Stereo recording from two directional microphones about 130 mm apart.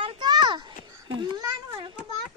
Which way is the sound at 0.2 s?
35° right (ahead or behind).